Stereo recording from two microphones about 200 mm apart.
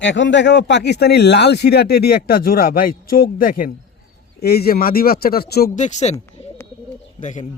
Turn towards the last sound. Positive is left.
turn(degrees=35)  # may be behind; listen again after turning